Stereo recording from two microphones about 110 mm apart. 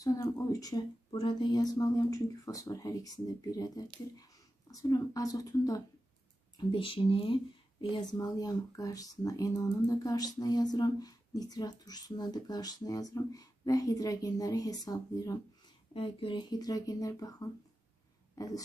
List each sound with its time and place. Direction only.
0.0 s speech: 30° left (ahead or behind)
1.1 s speech: 45° left (ahead or behind)
6.7 s speech: 55° left (ahead or behind)
7.9 s speech: 35° left (ahead or behind)
15.9 s speech: 50° left (ahead or behind); by 17.5 s 35° left (ahead or behind)
18.3 s a sound: 35° left (ahead or behind)